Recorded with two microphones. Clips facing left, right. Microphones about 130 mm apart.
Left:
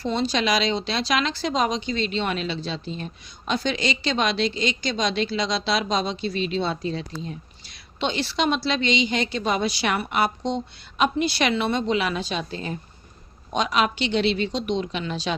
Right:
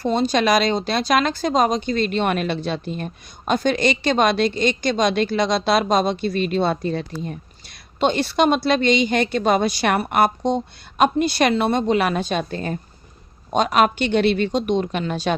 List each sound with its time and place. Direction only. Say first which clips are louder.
0.0 s speech: right 5 dB; 50° right (ahead or behind)